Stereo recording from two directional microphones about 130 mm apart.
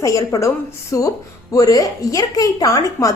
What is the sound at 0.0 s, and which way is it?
A woman's voice, 25° left (ahead or behind).